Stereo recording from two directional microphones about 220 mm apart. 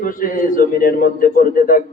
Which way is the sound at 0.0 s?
40° left (ahead or behind).